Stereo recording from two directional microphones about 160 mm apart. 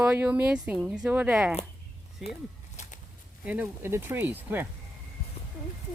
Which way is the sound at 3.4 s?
10° right (ahead or behind).